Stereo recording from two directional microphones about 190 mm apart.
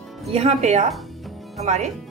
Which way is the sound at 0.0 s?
Centre (ahead or behind).